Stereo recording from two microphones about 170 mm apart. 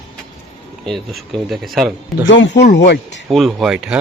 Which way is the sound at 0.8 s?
Centre (ahead or behind).